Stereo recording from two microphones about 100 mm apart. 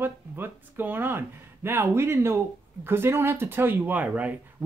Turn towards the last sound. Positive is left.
turn(degrees=-15)  # may be behind; listen again after turning